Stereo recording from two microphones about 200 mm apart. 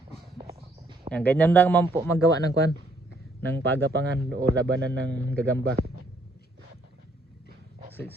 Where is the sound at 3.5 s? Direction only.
60° right (ahead or behind).